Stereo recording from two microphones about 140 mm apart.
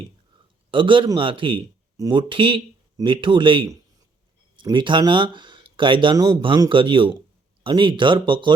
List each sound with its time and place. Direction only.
0.7 s speech: 35° right (ahead or behind)